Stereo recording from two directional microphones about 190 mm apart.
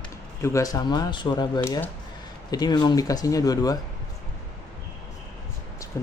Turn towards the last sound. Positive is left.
turn(degrees=15)  # may be behind; listen again after turning